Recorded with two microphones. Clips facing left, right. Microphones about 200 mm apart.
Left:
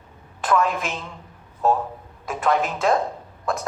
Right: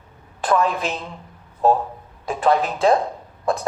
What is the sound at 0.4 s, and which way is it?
A woman's voice, 35° right (ahead or behind).